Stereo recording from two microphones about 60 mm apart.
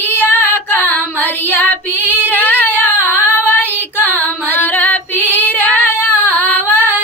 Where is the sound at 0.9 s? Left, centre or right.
Left.